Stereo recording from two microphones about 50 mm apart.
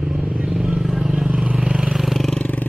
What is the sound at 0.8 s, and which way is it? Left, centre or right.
Vehicle, centre.